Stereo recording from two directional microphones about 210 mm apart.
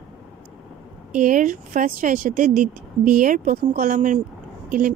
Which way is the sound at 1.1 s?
40° right (ahead or behind).